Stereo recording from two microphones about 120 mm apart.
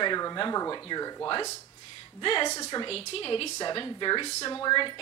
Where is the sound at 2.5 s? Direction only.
25° left (ahead or behind).